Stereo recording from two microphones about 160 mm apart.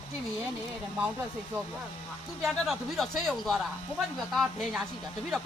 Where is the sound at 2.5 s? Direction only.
Centre (ahead or behind).